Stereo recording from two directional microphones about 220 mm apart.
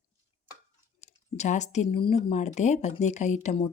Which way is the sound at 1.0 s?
30° left (ahead or behind).